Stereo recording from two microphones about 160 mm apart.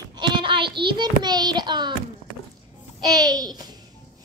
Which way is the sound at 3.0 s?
25° right (ahead or behind).